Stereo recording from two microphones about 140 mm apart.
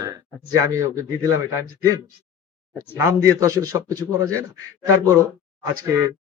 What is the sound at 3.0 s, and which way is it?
A man's voice, 25° right (ahead or behind).